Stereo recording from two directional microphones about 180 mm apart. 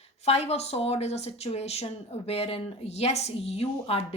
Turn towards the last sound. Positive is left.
turn(degrees=35)  # may be behind; listen again after turning